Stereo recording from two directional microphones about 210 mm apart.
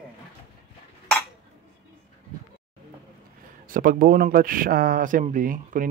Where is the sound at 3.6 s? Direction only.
40° right (ahead or behind).